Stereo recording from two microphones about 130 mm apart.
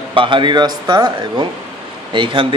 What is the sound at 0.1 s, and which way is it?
A man's voice, 40° right (ahead or behind).